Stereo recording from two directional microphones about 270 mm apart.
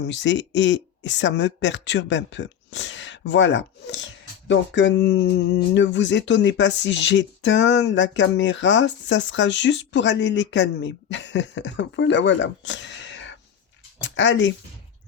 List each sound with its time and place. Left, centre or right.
0.0 s speech: left